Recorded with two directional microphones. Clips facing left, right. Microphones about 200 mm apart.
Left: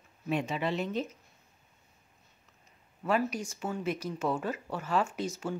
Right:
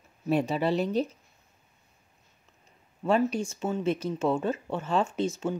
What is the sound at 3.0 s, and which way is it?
Speech, 30° right (ahead or behind).